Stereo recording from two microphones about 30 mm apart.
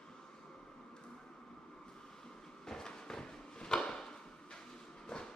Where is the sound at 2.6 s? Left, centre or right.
Centre.